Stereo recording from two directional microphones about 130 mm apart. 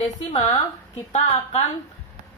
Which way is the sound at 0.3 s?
45° left (ahead or behind).